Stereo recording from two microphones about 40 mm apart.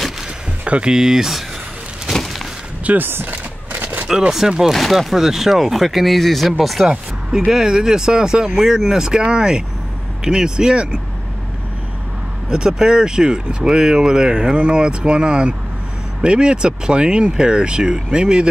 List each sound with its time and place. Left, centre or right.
0.7 s speech: right
0.9 s speech: centre
2.1 s a sound: centre
3.0 s speech: right
3.3 s a sound: right
4.3 s speech: centre
4.7 s speech: centre
6.9 s speech: centre
12.4 s speech: centre